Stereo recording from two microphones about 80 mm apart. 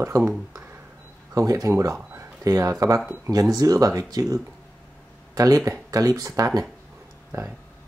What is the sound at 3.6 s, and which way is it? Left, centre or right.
Speech, right.